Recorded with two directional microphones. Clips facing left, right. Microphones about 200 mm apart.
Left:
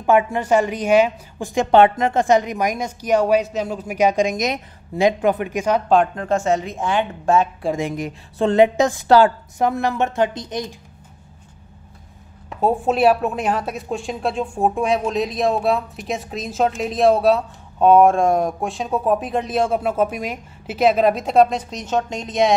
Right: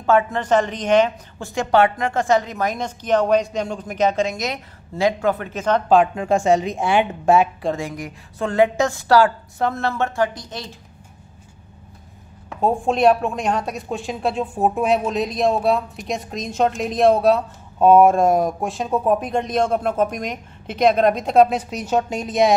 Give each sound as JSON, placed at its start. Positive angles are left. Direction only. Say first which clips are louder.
{"t": 0.0, "sound": "a woman's voice", "louder": "left 1 dB", "side_deg": 15}
{"t": 5.9, "sound": "a woman's voice", "louder": "right 4 dB", "side_deg": -5}
{"t": 7.7, "sound": "a woman's voice", "louder": "left 4 dB", "side_deg": 20}
{"t": 12.5, "sound": "a woman's voice", "louder": "left 1 dB", "side_deg": 5}